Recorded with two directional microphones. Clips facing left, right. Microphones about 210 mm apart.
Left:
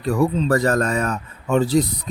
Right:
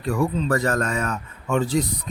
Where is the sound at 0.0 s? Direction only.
35° left (ahead or behind).